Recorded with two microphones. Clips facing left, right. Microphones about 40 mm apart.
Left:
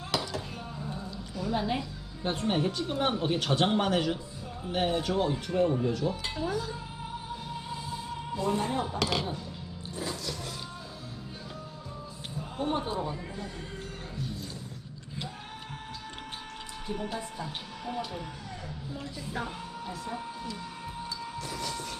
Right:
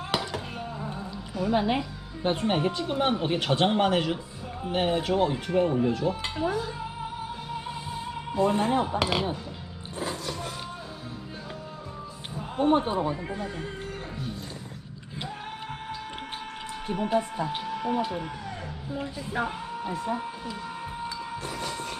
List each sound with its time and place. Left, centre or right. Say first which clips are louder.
0.1 s a sound: right 2 dB; right
1.3 s speech: right 5 dB; right
8.4 s speech: right 6 dB; right
9.9 s music: right 4 dB; right
12.4 s speech: right 8 dB; right
16.8 s speech: right 9 dB; right
21.1 s train: right 3 dB; right